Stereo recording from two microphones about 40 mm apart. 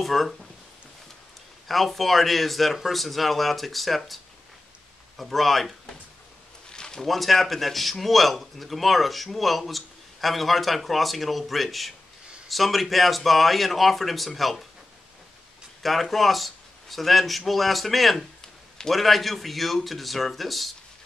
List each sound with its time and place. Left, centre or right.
0.0 s speech: centre
1.7 s speech: centre
6.7 s a sound: centre
7.1 s speech: centre
15.8 s speech: centre